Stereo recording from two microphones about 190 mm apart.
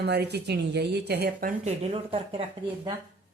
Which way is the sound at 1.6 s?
35° right (ahead or behind).